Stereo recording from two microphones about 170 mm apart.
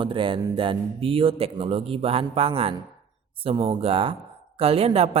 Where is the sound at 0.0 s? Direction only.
30° right (ahead or behind).